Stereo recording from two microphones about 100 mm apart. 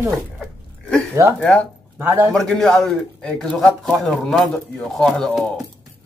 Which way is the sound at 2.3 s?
5° left (ahead or behind).